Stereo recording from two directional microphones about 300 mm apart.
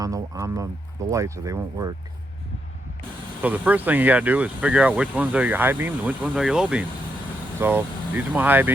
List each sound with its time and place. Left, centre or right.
0.0 s speech: centre
3.4 s speech: centre